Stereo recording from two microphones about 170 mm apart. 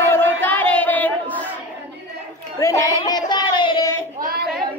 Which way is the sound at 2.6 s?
20° left (ahead or behind).